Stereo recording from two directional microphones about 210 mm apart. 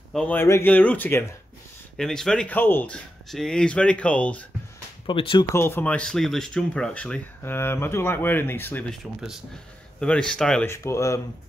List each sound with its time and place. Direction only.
0.1 s speech: 5° left (ahead or behind)
5.0 s speech: 25° left (ahead or behind)
5.5 s speech: 10° left (ahead or behind)